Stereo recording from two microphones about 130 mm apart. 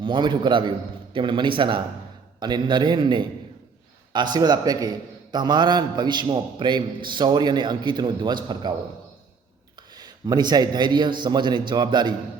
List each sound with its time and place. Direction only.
0.0 s a man's voice: 40° right (ahead or behind)
9.9 s a man's voice: 35° right (ahead or behind)